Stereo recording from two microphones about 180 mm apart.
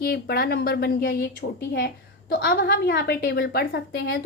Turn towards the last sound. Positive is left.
turn(degrees=75)  # may be behind; listen again after turning